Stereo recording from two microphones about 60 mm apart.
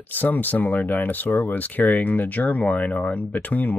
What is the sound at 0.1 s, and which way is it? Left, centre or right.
Speech, left.